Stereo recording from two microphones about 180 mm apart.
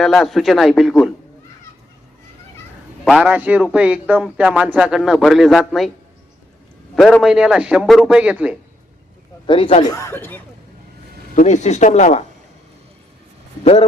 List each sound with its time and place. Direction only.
0.0 s a man's voice: centre (ahead or behind)
3.0 s a man's voice: centre (ahead or behind)
6.9 s a man's voice: centre (ahead or behind)
9.5 s speech: 30° left (ahead or behind)
9.9 s speech: 15° left (ahead or behind)
11.3 s speech: 40° left (ahead or behind)